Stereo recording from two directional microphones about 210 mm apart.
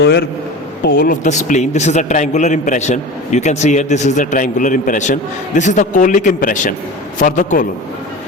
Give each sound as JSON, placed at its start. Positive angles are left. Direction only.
{"t": 0.0, "sound": "a man's voice", "side_deg": 50}